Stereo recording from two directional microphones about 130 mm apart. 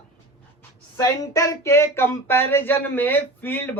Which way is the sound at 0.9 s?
25° left (ahead or behind).